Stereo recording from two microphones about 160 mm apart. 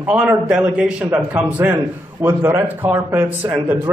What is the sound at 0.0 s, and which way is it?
A man's voice, 10° right (ahead or behind).